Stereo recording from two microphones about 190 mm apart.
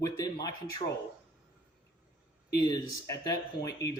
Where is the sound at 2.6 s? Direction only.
20° left (ahead or behind).